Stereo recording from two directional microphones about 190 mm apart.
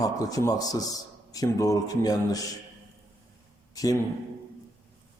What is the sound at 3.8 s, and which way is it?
Speech, 20° left (ahead or behind).